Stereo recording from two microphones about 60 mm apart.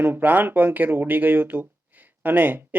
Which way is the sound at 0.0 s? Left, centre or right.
Right.